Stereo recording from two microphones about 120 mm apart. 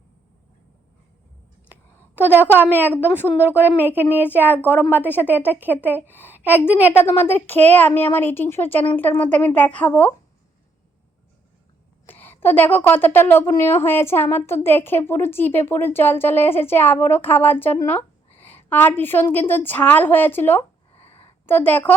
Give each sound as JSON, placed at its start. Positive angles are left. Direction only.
{"t": 2.6, "sound": "a woman's voice", "side_deg": -15}
{"t": 6.9, "sound": "speech", "side_deg": 20}
{"t": 12.0, "sound": "a woman's voice", "side_deg": 15}
{"t": 20.9, "sound": "a sound", "side_deg": 55}
{"t": 21.4, "sound": "speech", "side_deg": 15}